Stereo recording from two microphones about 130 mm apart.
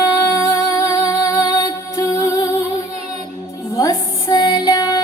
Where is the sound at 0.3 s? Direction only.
25° left (ahead or behind).